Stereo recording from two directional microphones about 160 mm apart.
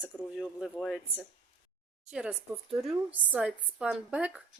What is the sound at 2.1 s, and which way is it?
Speech, 5° right (ahead or behind).